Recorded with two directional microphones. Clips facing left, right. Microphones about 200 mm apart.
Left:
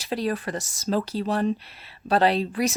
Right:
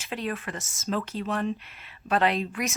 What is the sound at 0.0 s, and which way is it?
Speech, 35° left (ahead or behind).